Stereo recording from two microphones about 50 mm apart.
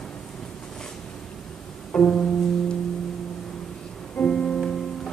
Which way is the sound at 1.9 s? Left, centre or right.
Left.